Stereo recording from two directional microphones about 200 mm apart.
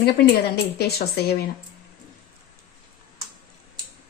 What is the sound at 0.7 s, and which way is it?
Speech, 50° left (ahead or behind).